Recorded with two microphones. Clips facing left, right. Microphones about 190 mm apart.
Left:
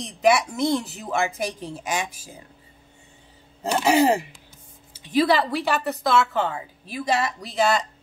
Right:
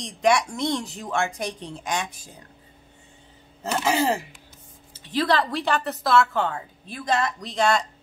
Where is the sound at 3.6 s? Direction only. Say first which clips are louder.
Left 4 dB; 15° left (ahead or behind).